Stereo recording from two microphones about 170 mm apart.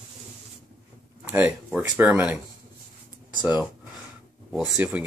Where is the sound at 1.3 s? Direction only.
10° right (ahead or behind).